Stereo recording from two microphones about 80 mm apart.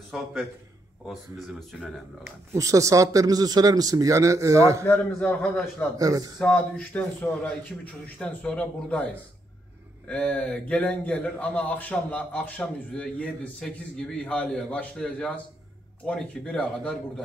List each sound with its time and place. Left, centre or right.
0.1 s a man's voice: centre
1.7 s a man's voice: centre
2.5 s speech: right
4.8 s a man's voice: left
5.9 s speech: right
6.5 s a man's voice: left